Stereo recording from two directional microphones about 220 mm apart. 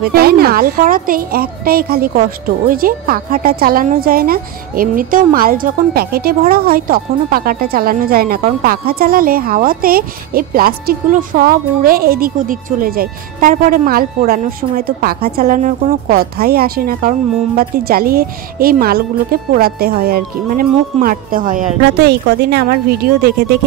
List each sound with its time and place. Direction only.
0.1 s a woman's voice: 45° right (ahead or behind)